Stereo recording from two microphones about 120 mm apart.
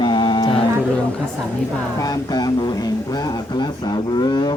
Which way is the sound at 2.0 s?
35° left (ahead or behind).